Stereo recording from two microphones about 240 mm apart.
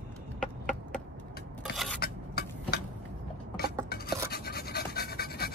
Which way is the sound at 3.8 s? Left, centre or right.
Left.